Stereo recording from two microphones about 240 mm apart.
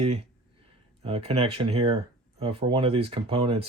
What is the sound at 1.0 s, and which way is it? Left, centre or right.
Speech, right.